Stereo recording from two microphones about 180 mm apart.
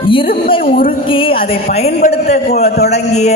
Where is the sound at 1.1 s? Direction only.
30° left (ahead or behind).